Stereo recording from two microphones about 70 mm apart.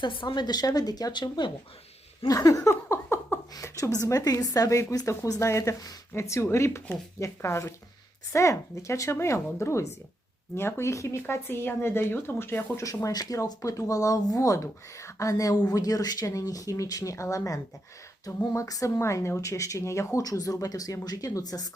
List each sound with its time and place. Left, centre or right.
0.0 s a woman's voice: left
2.2 s a sound: left
3.5 s a woman's voice: left
12.7 s speech: left